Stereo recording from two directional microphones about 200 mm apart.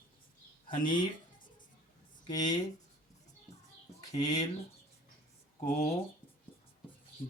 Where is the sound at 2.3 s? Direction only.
20° left (ahead or behind).